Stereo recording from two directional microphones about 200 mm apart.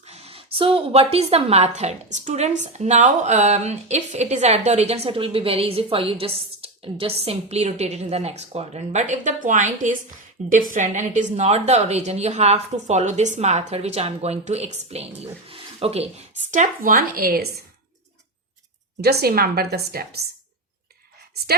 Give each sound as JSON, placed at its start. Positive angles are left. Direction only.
{"t": 0.0, "sound": "a woman's voice", "side_deg": -30}
{"t": 16.5, "sound": "a woman's voice", "side_deg": -40}
{"t": 19.0, "sound": "a woman's voice", "side_deg": -50}